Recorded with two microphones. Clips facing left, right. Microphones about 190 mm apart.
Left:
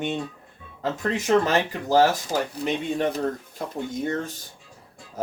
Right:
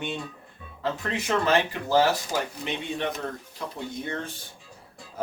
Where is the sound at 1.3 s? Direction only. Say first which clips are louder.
Left 3 dB; 40° left (ahead or behind).